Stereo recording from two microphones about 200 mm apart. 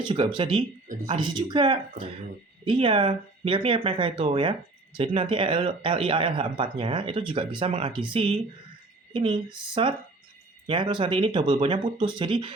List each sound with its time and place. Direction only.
0.0 s speech: 25° right (ahead or behind)